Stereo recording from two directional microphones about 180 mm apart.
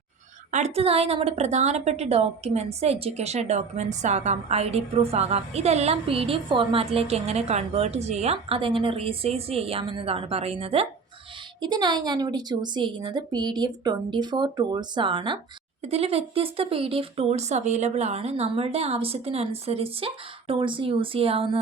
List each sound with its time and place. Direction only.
0.5 s a woman's voice: 35° right (ahead or behind)